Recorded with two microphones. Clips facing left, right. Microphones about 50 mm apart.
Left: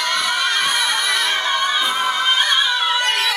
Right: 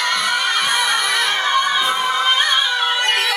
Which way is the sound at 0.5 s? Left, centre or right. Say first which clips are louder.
Right 1 dB; centre.